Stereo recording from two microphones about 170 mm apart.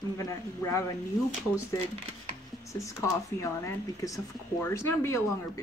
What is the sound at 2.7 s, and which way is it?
Speech, 15° left (ahead or behind).